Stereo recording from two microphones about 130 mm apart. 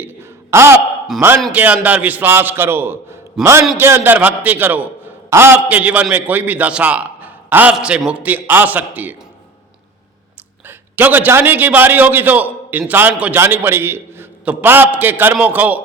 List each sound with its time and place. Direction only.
0.0 s a sound: 20° right (ahead or behind)
1.2 s a man's voice: 20° right (ahead or behind)
3.4 s a man's voice: 5° right (ahead or behind)
3.8 s a man's voice: 15° right (ahead or behind)
10.7 s a man's voice: 15° right (ahead or behind)